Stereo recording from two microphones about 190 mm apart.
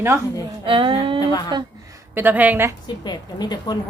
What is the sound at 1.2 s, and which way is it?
Speech, 20° left (ahead or behind).